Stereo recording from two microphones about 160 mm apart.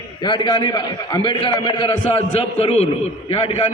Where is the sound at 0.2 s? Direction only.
30° left (ahead or behind).